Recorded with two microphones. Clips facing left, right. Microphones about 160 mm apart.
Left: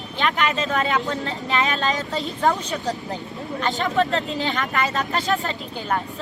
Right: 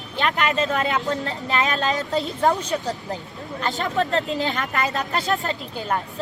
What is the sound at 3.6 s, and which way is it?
Speech, 40° right (ahead or behind).